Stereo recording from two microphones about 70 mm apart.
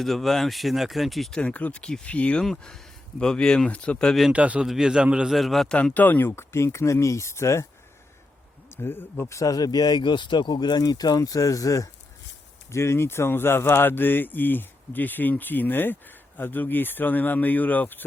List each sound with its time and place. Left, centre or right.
0.0 s speech: centre
1.4 s speech: centre
2.4 s speech: centre
4.3 s a man's voice: centre
4.6 s a man's voice: centre
5.3 s speech: centre
5.7 s speech: left
8.7 s speech: left
9.3 s speech: left
12.7 s speech: left